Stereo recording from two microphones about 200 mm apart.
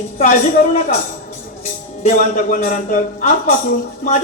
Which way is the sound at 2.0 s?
40° left (ahead or behind).